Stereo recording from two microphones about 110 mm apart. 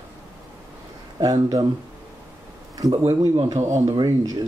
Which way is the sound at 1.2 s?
35° right (ahead or behind).